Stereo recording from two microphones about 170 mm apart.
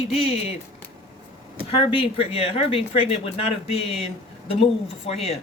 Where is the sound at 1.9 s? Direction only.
35° left (ahead or behind).